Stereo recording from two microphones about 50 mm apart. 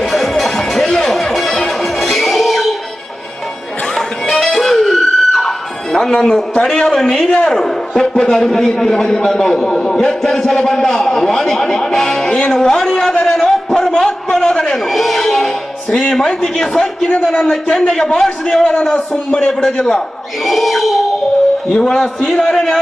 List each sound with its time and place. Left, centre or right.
0.0 s music: centre
3.9 s music: centre
6.6 s a man's voice: centre
14.8 s a man's voice: centre
20.4 s a sound: centre
21.7 s a man's voice: centre